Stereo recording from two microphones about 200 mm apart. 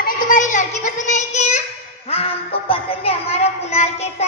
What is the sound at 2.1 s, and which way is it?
Music, 30° left (ahead or behind).